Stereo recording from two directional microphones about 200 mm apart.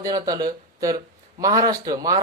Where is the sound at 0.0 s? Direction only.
20° right (ahead or behind).